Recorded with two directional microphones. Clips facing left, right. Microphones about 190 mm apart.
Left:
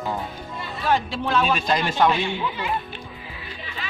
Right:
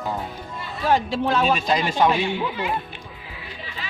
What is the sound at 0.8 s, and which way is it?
Speech, 40° right (ahead or behind).